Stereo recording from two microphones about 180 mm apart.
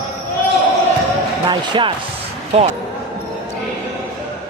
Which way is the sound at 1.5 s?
25° right (ahead or behind).